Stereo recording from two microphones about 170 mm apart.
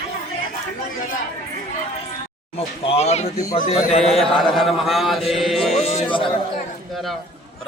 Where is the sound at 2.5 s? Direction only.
40° left (ahead or behind).